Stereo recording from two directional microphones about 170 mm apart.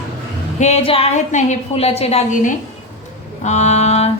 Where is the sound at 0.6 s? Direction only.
40° left (ahead or behind).